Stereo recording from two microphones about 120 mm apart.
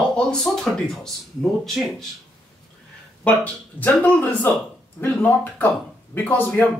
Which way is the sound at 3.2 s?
10° left (ahead or behind).